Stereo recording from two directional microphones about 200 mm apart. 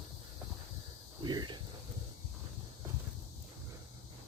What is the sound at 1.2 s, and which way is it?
Snake, 20° right (ahead or behind).